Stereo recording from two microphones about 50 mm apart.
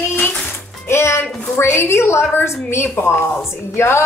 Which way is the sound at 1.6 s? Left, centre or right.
Left.